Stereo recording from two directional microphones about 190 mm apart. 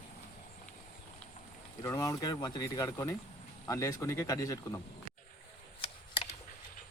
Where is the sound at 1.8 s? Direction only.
15° left (ahead or behind).